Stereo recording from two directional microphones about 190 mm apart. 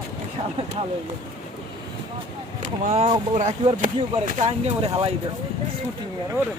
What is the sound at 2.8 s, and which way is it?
Speech, 35° right (ahead or behind).